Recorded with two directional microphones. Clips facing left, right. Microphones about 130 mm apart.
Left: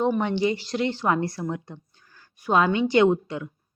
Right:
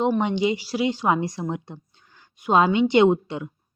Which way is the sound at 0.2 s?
15° right (ahead or behind).